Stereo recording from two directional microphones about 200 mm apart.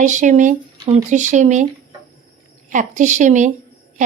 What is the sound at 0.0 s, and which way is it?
Speech, 40° right (ahead or behind).